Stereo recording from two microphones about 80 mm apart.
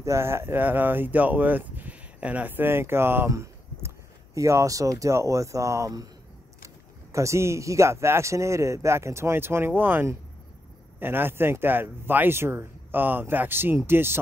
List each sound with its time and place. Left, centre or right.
0.0 s speech: right
3.3 s speech: right